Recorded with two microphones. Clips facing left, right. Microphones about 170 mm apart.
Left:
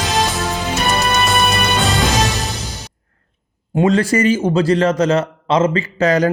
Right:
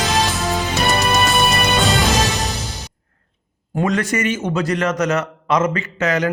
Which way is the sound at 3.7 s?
25° left (ahead or behind).